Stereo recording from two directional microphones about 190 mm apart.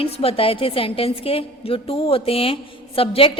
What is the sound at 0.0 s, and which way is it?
A woman's voice, 30° left (ahead or behind).